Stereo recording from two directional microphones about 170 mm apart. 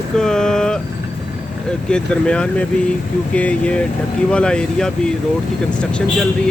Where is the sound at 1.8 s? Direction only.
5° left (ahead or behind).